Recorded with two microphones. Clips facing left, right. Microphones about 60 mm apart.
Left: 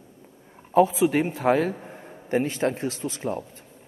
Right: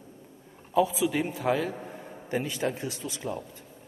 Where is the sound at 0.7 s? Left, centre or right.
Left.